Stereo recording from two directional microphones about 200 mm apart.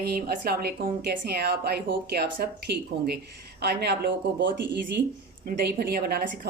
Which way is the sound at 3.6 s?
55° right (ahead or behind).